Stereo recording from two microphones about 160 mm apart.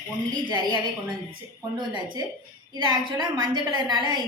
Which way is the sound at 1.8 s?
30° right (ahead or behind).